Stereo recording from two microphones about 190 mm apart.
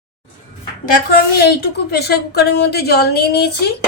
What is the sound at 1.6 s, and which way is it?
Speech, 55° left (ahead or behind).